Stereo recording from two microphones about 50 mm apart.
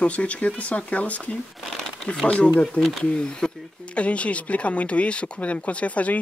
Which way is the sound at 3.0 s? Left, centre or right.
Centre.